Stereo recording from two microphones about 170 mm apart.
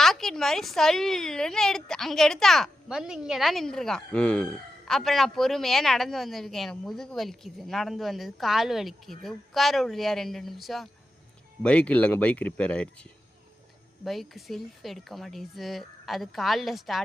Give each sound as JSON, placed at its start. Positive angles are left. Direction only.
{"t": 0.0, "sound": "speech", "side_deg": 0}
{"t": 14.0, "sound": "speech", "side_deg": 0}